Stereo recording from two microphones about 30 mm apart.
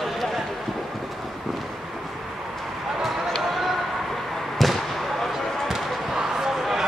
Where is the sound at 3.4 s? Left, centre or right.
Centre.